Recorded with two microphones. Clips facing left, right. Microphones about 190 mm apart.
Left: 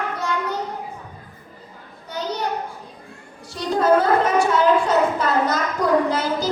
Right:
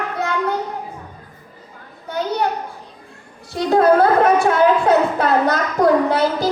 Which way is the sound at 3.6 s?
65° right (ahead or behind).